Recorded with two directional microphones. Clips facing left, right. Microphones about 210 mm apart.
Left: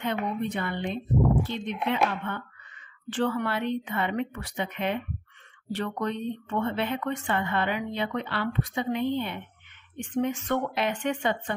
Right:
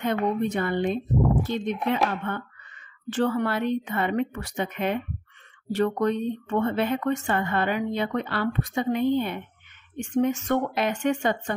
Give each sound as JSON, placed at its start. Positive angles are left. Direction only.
{"t": 0.0, "sound": "speech", "side_deg": -45}